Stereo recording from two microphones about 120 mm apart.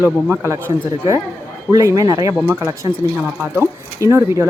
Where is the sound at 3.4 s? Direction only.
20° right (ahead or behind).